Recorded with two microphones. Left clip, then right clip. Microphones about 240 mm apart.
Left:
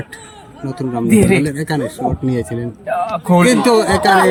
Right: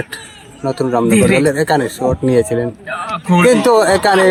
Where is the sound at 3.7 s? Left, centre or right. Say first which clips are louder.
Right 1 dB; centre.